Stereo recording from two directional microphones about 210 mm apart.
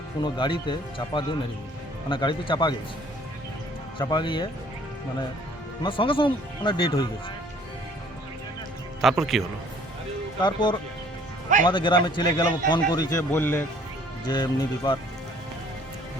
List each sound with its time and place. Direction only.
0.2 s speech: 20° left (ahead or behind)
3.9 s speech: 20° left (ahead or behind)
5.8 s speech: 25° left (ahead or behind)
9.0 s speech: centre (ahead or behind)
10.4 s a man's voice: 20° left (ahead or behind)